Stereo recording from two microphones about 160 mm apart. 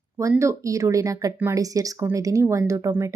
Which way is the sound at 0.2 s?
20° right (ahead or behind).